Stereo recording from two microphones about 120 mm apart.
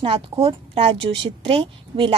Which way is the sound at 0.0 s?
45° right (ahead or behind).